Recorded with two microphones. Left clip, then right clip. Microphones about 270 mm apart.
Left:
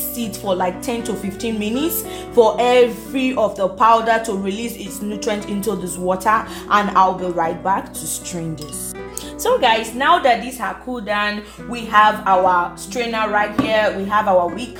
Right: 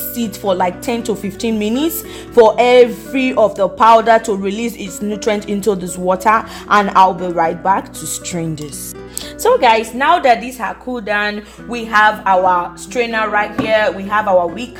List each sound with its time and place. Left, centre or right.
0.2 s speech: right
9.4 s speech: right